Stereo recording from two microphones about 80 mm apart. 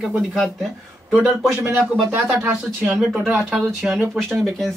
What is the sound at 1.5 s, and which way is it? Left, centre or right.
Speech, right.